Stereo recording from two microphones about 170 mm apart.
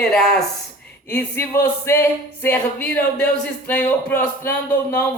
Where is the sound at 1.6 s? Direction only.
15° left (ahead or behind).